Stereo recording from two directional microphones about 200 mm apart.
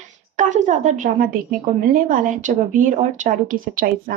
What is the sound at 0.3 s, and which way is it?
A woman's voice, 40° right (ahead or behind).